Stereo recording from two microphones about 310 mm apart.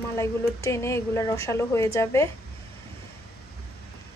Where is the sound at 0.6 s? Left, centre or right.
Centre.